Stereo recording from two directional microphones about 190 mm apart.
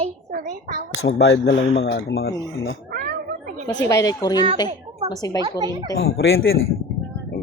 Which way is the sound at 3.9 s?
20° left (ahead or behind).